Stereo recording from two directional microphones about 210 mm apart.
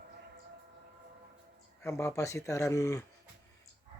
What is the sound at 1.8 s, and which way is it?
Speech, 15° left (ahead or behind).